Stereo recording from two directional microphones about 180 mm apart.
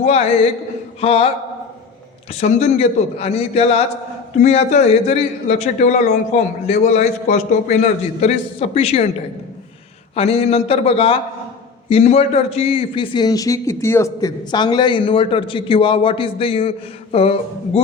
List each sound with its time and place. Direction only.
1.0 s a man's voice: 35° left (ahead or behind)
2.4 s a man's voice: 40° left (ahead or behind)
10.2 s a man's voice: 35° left (ahead or behind)